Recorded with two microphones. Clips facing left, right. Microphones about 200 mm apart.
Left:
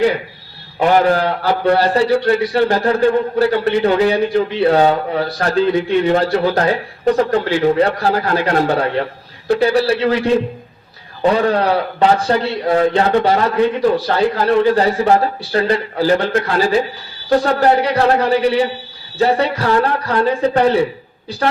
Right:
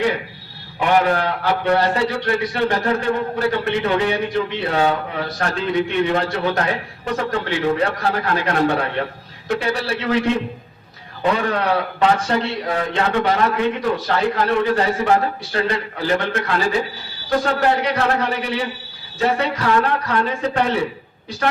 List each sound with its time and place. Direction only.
0.8 s a man's voice: 35° left (ahead or behind)
11.2 s a man's voice: 35° left (ahead or behind)